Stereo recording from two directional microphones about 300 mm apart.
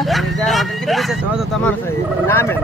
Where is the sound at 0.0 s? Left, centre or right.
Centre.